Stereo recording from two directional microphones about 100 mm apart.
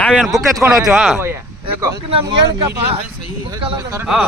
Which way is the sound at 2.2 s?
35° right (ahead or behind).